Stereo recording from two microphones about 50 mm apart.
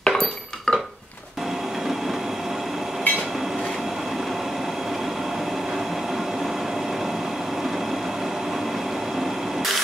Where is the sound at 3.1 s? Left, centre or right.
Centre.